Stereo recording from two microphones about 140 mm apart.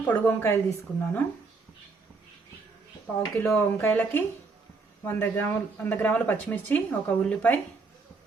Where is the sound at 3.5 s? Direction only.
10° left (ahead or behind).